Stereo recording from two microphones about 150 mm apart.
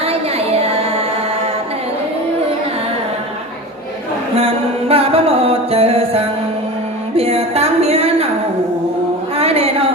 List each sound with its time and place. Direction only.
0.0 s music: 40° right (ahead or behind)
4.4 s music: 40° right (ahead or behind)
7.2 s a sound: 40° right (ahead or behind)
9.4 s music: 40° right (ahead or behind)